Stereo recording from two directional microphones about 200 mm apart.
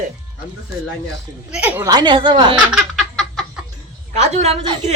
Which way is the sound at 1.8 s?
20° right (ahead or behind).